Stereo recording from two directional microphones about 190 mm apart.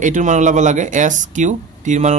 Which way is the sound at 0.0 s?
40° right (ahead or behind).